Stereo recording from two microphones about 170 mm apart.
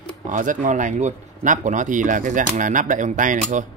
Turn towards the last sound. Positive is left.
turn(degrees=-50)  # may be behind; listen again after turning